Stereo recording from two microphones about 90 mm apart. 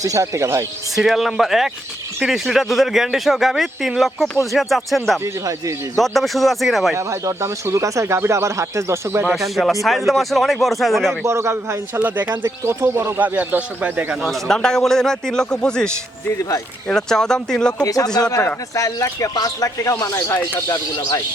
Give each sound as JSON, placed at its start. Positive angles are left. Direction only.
{"t": 0.0, "sound": "speech", "side_deg": -35}
{"t": 0.9, "sound": "speech", "side_deg": 0}
{"t": 5.2, "sound": "speech", "side_deg": -35}
{"t": 6.0, "sound": "speech", "side_deg": 0}
{"t": 6.9, "sound": "speech", "side_deg": -30}
{"t": 10.1, "sound": "speech", "side_deg": 0}
{"t": 11.3, "sound": "speech", "side_deg": -30}
{"t": 11.9, "sound": "speech", "side_deg": -20}
{"t": 13.1, "sound": "speech", "side_deg": -20}
{"t": 14.2, "sound": "speech", "side_deg": 5}
{"t": 16.9, "sound": "speech", "side_deg": 5}
{"t": 17.8, "sound": "speech", "side_deg": 45}